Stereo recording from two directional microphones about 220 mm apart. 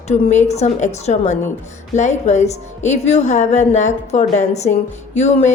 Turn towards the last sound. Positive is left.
turn(degrees=30)  # may be behind; listen again after turning